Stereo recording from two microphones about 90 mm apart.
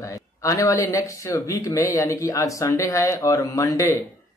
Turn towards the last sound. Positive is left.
turn(degrees=35)  # may be behind; listen again after turning